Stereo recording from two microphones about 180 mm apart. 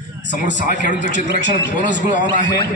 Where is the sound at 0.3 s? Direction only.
45° left (ahead or behind).